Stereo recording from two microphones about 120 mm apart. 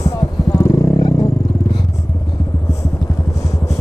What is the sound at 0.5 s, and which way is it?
Vehicle, 30° left (ahead or behind).